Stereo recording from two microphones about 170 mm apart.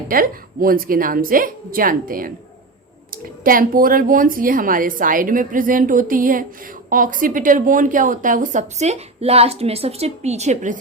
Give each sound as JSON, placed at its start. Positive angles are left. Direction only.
{"t": 0.1, "sound": "a woman's voice", "side_deg": -55}
{"t": 3.4, "sound": "a woman's voice", "side_deg": -55}